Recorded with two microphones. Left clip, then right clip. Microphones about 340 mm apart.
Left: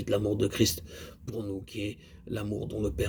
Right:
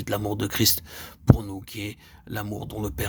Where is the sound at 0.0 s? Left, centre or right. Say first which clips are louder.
Even; right.